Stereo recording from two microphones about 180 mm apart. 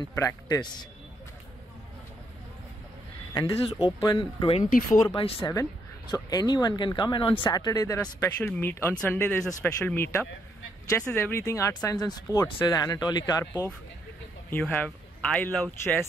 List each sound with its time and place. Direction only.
0.1 s speech: 15° left (ahead or behind)
4.0 s speech: 25° left (ahead or behind)
5.5 s speech: 20° left (ahead or behind)
13.5 s speech: 10° left (ahead or behind)